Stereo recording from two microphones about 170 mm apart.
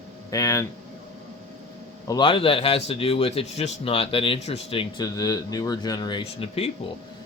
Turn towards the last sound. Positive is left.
turn(degrees=35)  # may be behind; listen again after turning